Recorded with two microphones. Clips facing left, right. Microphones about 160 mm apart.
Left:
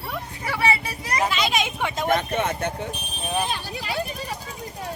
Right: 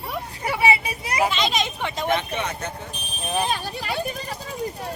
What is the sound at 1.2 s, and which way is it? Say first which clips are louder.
Speech: left 1 dB; 5° left (ahead or behind).